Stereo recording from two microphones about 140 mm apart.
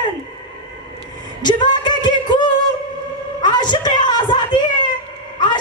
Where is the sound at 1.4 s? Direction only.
30° left (ahead or behind).